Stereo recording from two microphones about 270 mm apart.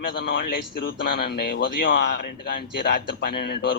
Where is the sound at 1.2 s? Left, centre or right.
Left.